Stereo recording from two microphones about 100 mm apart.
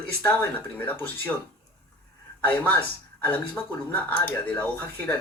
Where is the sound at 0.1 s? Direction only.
15° left (ahead or behind).